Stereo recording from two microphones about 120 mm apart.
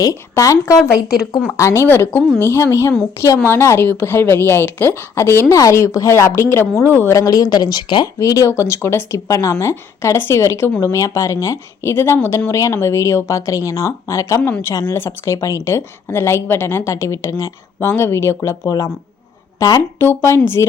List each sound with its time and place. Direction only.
0.0 s speech: 30° left (ahead or behind)
1.0 s speech: 5° right (ahead or behind)
1.5 s speech: 25° left (ahead or behind)